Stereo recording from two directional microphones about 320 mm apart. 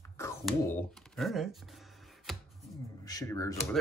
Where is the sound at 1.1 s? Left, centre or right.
Centre.